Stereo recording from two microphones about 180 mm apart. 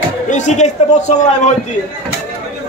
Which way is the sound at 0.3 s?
40° left (ahead or behind).